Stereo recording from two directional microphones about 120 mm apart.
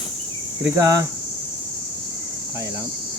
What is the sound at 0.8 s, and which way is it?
Speech, 25° right (ahead or behind).